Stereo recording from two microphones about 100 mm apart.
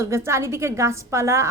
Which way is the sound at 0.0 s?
30° right (ahead or behind).